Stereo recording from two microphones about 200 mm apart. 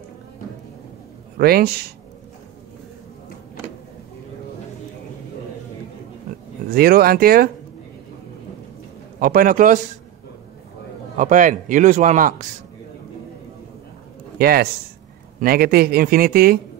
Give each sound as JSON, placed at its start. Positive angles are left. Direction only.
{"t": 1.4, "sound": "speech", "side_deg": -50}
{"t": 6.7, "sound": "speech", "side_deg": -50}
{"t": 9.2, "sound": "speech", "side_deg": -45}
{"t": 11.1, "sound": "a man's voice", "side_deg": -40}
{"t": 14.4, "sound": "speech", "side_deg": -50}